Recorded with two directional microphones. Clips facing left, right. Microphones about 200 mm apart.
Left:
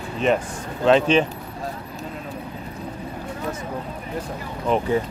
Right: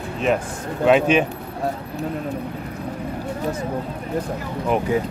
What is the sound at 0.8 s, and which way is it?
Speech, 10° right (ahead or behind).